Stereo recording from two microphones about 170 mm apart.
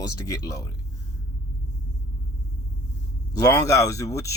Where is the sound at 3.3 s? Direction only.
20° left (ahead or behind).